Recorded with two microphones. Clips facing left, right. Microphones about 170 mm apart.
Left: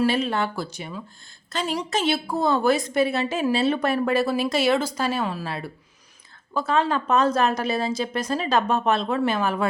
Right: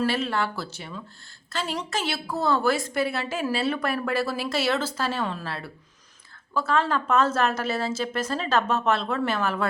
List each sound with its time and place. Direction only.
0.0 s a woman's voice: 20° left (ahead or behind)